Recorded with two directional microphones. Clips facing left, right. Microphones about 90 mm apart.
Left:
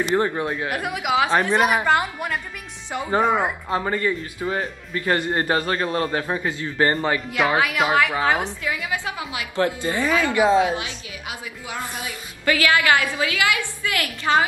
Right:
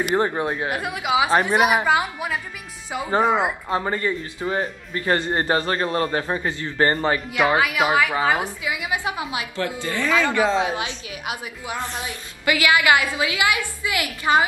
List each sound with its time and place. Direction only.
0.0 s a woman's voice: 20° right (ahead or behind)
0.7 s a woman's voice: centre (ahead or behind); by 4.5 s 15° right (ahead or behind)
4.5 s a woman's voice: centre (ahead or behind)
5.3 s a woman's voice: 25° right (ahead or behind)
5.9 s a man's voice: 5° left (ahead or behind)
6.9 s a woman's voice: 15° right (ahead or behind)
7.2 s a woman's voice: centre (ahead or behind); by 9.5 s 25° right (ahead or behind)
9.7 s a man's voice: 20° left (ahead or behind)
10.6 s a woman's voice: 25° right (ahead or behind)